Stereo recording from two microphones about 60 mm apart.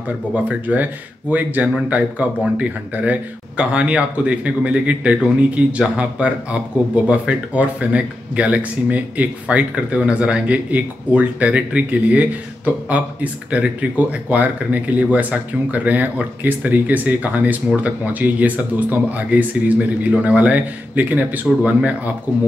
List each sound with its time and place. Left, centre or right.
0.3 s speech: right